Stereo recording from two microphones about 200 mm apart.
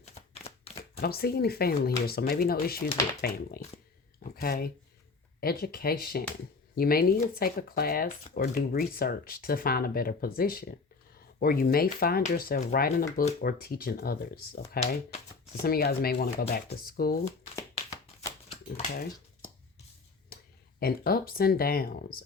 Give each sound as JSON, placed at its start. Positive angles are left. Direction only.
{"t": 0.0, "sound": "a sound", "side_deg": 30}
{"t": 0.9, "sound": "speech", "side_deg": 50}
{"t": 4.2, "sound": "a sound", "side_deg": 50}
{"t": 5.4, "sound": "speech", "side_deg": 50}
{"t": 18.4, "sound": "typewriter", "side_deg": 30}
{"t": 20.3, "sound": "speech", "side_deg": 50}